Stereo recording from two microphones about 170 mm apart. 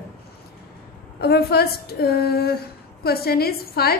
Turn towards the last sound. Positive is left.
turn(degrees=65)  # may be behind; listen again after turning